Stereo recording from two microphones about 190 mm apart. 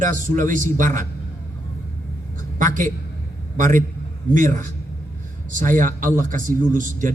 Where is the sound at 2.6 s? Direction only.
45° right (ahead or behind).